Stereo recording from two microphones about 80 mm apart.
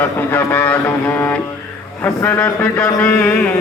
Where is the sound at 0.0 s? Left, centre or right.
Left.